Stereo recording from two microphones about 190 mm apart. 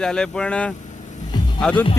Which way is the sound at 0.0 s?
5° left (ahead or behind).